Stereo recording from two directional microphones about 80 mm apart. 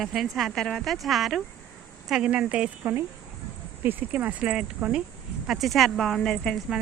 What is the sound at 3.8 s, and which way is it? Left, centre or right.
Speech, right.